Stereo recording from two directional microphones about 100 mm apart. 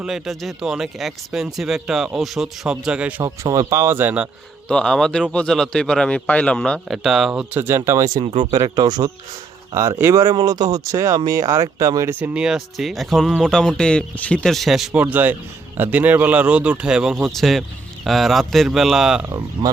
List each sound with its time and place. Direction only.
0.0 s speech: 5° right (ahead or behind)
3.7 s speech: 30° right (ahead or behind)
4.7 s speech: 5° left (ahead or behind)
7.5 s speech: 25° right (ahead or behind)
8.4 s speech: 45° right (ahead or behind)
9.7 s speech: 30° right (ahead or behind)
10.3 s speech: 40° right (ahead or behind)
12.2 s speech: 10° right (ahead or behind)
15.0 s speech: 20° right (ahead or behind)